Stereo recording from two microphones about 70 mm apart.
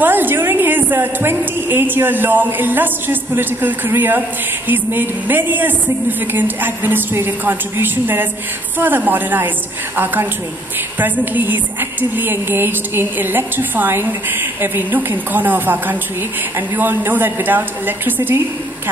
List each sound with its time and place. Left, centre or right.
0.0 s a woman's voice: right
11.0 s a woman's voice: right